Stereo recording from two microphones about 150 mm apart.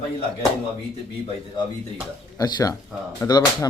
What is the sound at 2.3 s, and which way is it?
A man's voice, 25° left (ahead or behind).